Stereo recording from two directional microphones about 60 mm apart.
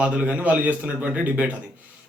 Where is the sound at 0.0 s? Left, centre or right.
Right.